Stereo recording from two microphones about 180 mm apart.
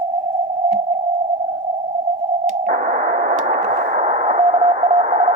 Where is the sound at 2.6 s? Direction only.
45° right (ahead or behind).